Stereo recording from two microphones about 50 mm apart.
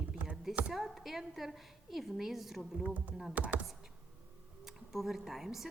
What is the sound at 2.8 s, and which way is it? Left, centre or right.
Speech, right.